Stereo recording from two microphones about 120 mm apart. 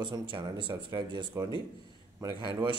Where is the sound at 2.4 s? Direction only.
40° right (ahead or behind).